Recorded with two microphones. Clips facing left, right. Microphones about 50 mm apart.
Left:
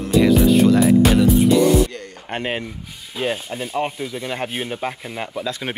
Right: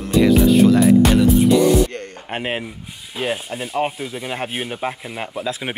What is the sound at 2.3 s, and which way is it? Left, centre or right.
Rub, centre.